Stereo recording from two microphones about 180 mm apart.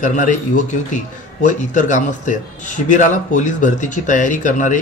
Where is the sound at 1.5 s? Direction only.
45° left (ahead or behind).